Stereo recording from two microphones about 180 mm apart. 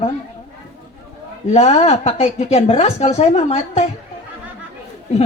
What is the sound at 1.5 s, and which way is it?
A woman's voice, 40° left (ahead or behind).